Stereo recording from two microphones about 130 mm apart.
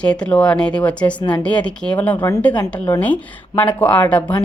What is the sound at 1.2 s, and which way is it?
Speech, 35° left (ahead or behind).